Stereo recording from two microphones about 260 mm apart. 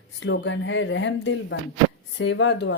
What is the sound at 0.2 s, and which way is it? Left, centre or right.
A woman's voice, left.